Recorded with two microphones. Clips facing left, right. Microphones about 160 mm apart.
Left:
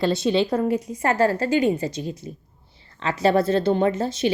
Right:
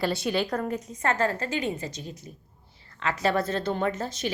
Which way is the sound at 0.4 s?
5° left (ahead or behind).